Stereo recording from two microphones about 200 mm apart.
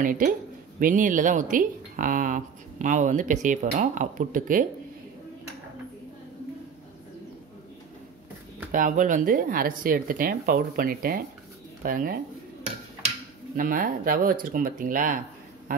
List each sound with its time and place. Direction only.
0.0 s speech: 40° right (ahead or behind)
8.7 s speech: 40° right (ahead or behind)
13.6 s speech: 45° right (ahead or behind)